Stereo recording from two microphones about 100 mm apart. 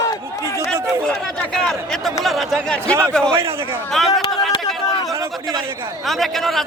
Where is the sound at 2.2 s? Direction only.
5° left (ahead or behind).